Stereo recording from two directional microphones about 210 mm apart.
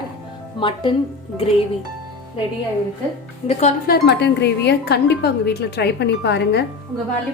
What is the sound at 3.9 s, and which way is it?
Speech, 55° left (ahead or behind).